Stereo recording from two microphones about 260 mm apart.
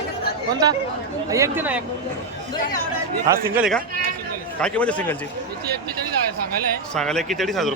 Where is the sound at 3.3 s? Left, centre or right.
Centre.